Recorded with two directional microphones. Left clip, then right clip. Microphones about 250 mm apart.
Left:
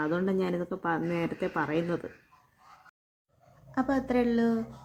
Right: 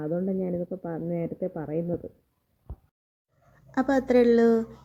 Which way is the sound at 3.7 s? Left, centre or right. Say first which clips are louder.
Right 6 dB; centre.